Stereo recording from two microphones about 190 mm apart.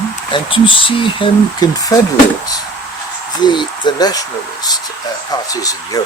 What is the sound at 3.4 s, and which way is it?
Speech, 25° left (ahead or behind).